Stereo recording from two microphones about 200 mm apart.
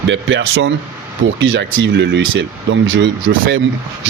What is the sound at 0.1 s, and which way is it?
Speech, 65° right (ahead or behind).